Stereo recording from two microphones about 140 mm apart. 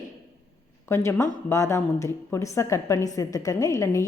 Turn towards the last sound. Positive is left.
turn(degrees=20)  # may be behind; listen again after turning